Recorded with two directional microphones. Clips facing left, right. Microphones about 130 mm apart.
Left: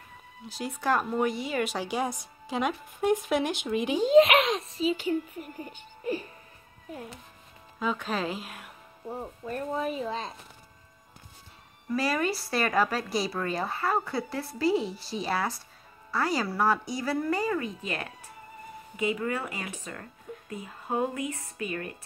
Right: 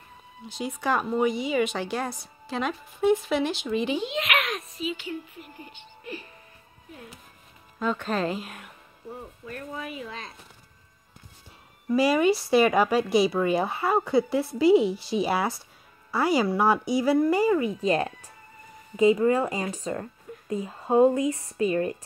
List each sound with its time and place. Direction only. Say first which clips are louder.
0.5 s speech: right 1 dB; centre (ahead or behind)
4.0 s a child's voice: left 9 dB; 35° left (ahead or behind)
7.8 s a woman's voice: right 3 dB; 5° left (ahead or behind)
9.1 s speech: left 4 dB; 30° left (ahead or behind)
11.9 s a woman's voice: right 7 dB; 5° right (ahead or behind)
13.6 s speech: right 5 dB; 15° right (ahead or behind)
13.8 s a woman's voice: right 6 dB; 5° right (ahead or behind)
16.4 s speech: right 4 dB; 20° right (ahead or behind)
16.8 s a woman's voice: right 8 dB; 5° right (ahead or behind)
17.4 s speech: right 7 dB; 20° right (ahead or behind)
17.8 s speech: right 11 dB; 35° right (ahead or behind)